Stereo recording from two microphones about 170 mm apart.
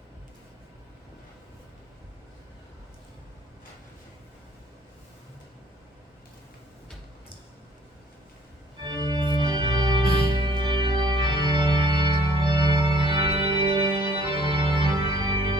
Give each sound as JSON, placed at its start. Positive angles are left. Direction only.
{"t": 8.8, "sound": "organ", "side_deg": -25}
{"t": 12.4, "sound": "music", "side_deg": -25}